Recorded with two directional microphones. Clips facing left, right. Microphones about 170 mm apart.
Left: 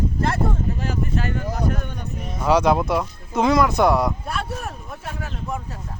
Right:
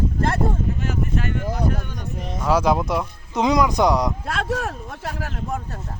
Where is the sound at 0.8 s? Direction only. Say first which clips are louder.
Even; 35° left (ahead or behind).